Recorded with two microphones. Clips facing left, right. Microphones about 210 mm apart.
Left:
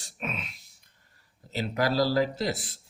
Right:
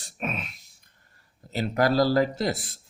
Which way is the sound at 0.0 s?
50° right (ahead or behind).